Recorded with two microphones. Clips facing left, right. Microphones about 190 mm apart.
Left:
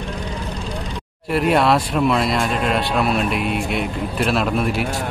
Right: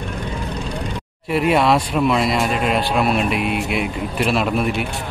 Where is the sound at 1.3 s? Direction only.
Centre (ahead or behind).